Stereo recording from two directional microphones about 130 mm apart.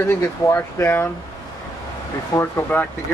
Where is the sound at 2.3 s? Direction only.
15° left (ahead or behind).